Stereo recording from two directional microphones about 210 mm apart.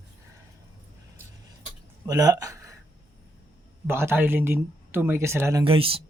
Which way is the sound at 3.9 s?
10° right (ahead or behind).